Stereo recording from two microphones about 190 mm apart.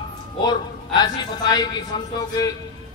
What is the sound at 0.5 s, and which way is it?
A woman's voice, 20° left (ahead or behind).